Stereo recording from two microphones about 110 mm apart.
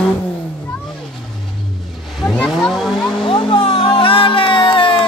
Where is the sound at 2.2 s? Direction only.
5° left (ahead or behind).